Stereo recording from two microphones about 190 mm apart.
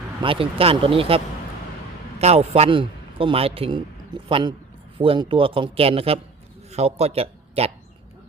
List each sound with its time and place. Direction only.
0.2 s a man's voice: 30° right (ahead or behind)